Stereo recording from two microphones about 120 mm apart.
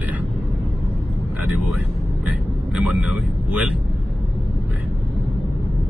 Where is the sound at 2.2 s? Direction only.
10° right (ahead or behind).